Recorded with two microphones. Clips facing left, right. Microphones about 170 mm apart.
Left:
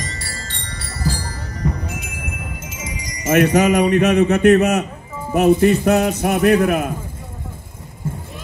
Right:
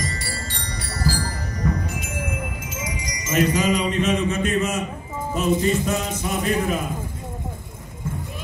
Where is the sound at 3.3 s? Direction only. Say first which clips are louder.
Left 6 dB; 65° left (ahead or behind).